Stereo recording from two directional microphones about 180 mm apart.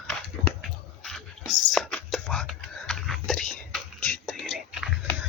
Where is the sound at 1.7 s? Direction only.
5° left (ahead or behind).